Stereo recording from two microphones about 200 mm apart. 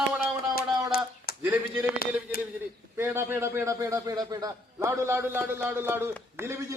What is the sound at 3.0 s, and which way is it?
A man's voice, 10° right (ahead or behind).